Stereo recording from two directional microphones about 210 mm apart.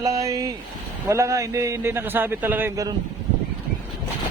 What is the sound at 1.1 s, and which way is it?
A man's voice, 15° right (ahead or behind).